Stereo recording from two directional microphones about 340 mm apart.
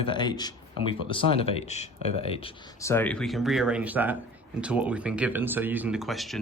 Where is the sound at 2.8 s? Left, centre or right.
Centre.